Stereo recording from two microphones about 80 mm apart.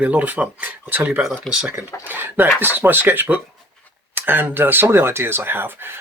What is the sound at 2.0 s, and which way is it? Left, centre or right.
Speech, right.